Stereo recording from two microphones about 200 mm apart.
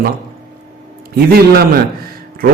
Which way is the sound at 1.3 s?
50° right (ahead or behind).